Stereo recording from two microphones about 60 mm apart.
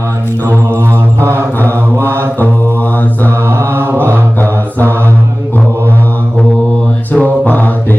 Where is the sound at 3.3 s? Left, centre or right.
Right.